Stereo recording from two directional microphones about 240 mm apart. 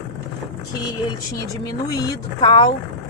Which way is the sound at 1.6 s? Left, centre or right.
Centre.